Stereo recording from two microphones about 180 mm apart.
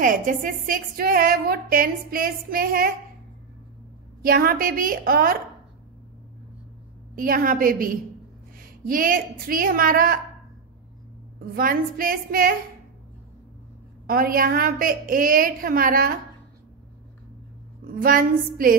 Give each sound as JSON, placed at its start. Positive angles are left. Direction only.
{"t": 0.0, "sound": "a woman's voice", "side_deg": -50}
{"t": 4.2, "sound": "a woman's voice", "side_deg": -55}
{"t": 7.2, "sound": "a woman's voice", "side_deg": -50}
{"t": 11.5, "sound": "a woman's voice", "side_deg": -55}
{"t": 14.0, "sound": "a woman's voice", "side_deg": -55}
{"t": 17.9, "sound": "a woman's voice", "side_deg": -50}